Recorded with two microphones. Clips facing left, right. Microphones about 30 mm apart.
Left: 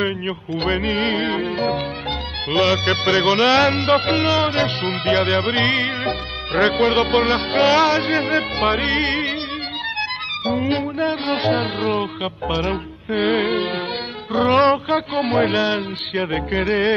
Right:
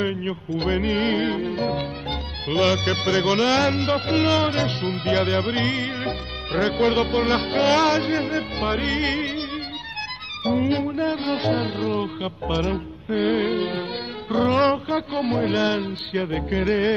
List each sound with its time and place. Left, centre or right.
0.5 s speech: left
1.3 s speech: left
4.3 s music: centre
4.6 s speech: left
7.2 s music: centre
8.3 s speech: left
10.4 s music: left
12.6 s speech: left
14.3 s music: centre
14.9 s speech: left